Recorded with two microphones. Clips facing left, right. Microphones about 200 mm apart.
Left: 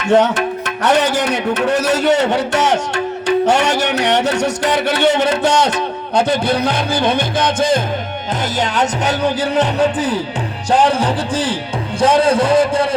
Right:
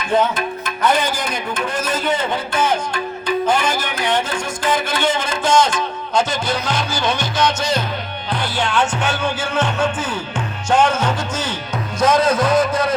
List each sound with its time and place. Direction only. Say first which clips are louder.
0.0 s music: left 5 dB; 75° left (ahead or behind); by 7.8 s 55° left (ahead or behind)
8.5 s speech: left 1 dB; 40° left (ahead or behind)